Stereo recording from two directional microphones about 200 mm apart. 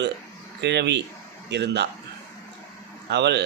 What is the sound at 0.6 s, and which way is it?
A man's voice, 60° right (ahead or behind).